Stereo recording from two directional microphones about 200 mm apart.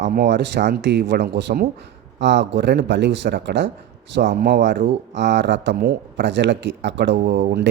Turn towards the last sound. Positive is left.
turn(degrees=-55)  # may be behind; listen again after turning